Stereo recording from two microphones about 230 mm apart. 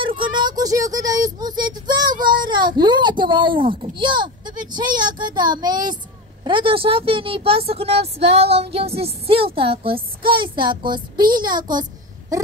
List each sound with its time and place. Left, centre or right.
0.2 s a child's voice: centre